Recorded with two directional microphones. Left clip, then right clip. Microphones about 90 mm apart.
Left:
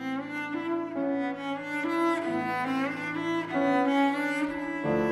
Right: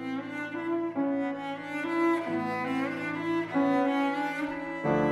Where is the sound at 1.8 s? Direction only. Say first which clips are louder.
Even; 35° left (ahead or behind).